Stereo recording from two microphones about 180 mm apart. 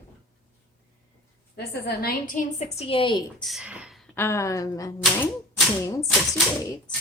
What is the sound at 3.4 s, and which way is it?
Speech, centre (ahead or behind).